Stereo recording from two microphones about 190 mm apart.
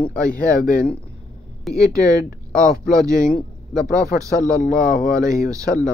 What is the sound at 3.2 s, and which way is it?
Speech, 5° left (ahead or behind).